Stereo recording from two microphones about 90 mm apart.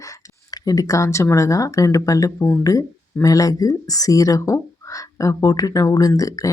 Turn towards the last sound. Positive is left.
turn(degrees=40)  # may be behind; listen again after turning